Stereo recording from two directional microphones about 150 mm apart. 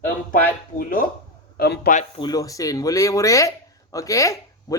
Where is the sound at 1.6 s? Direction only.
90° left.